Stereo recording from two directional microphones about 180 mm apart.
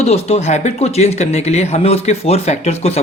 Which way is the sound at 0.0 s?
35° left (ahead or behind).